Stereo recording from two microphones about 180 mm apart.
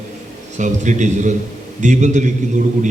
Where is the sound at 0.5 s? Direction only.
40° right (ahead or behind).